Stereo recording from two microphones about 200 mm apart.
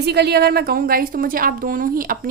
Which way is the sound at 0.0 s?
55° right (ahead or behind).